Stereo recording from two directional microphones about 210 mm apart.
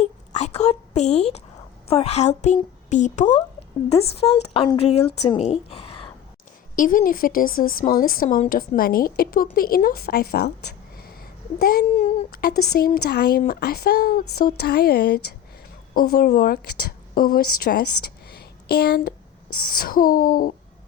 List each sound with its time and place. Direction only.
0.0 s a sound: 35° left (ahead or behind)
1.9 s speech: 30° left (ahead or behind)
4.2 s speech: 20° left (ahead or behind)
6.7 s a woman's voice: 40° left (ahead or behind)
11.6 s a woman's voice: 45° left (ahead or behind)
18.3 s a sound: 50° left (ahead or behind)
19.5 s a woman's voice: 45° left (ahead or behind)